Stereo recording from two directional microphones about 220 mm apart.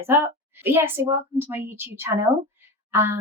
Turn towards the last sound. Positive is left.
turn(degrees=-10)  # may be behind; listen again after turning